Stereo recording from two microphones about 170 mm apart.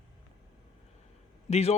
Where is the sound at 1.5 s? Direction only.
40° left (ahead or behind).